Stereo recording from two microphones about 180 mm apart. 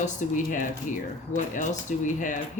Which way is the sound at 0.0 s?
45° left (ahead or behind).